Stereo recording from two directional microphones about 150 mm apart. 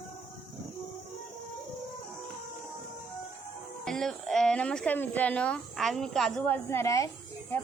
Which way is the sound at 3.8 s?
5° left (ahead or behind).